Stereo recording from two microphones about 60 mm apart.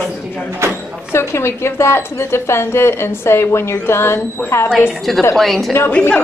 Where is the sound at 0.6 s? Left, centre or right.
Right.